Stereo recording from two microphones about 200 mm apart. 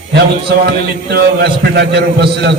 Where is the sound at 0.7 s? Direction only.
55° right (ahead or behind).